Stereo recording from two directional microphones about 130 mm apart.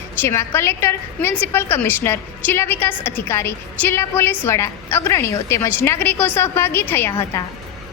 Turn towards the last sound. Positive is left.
turn(degrees=20)  # may be behind; listen again after turning